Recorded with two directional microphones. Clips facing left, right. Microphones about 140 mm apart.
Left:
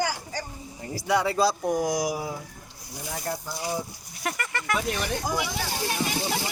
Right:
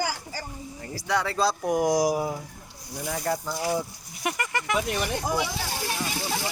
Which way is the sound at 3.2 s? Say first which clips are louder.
Right 4 dB; 90° right.